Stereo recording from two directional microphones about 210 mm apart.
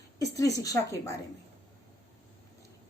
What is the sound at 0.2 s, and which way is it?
A woman's voice, 15° left (ahead or behind).